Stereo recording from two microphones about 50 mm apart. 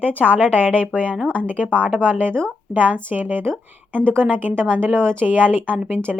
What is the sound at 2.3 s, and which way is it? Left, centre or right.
Speech, centre.